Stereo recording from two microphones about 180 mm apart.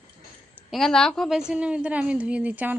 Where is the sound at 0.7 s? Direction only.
5° left (ahead or behind).